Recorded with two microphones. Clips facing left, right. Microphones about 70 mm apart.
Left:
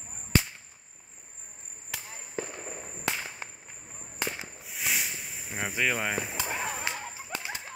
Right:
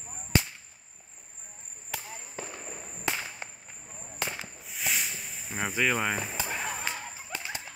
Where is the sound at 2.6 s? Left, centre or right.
Centre.